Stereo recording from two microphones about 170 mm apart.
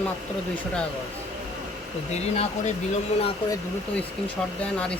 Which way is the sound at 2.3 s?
40° left (ahead or behind).